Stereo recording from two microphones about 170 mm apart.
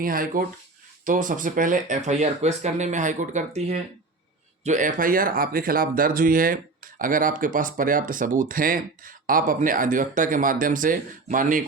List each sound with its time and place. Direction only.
0.0 s speech: 55° right (ahead or behind)